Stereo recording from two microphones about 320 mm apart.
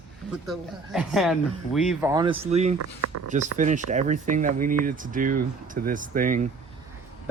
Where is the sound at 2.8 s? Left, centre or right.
Right.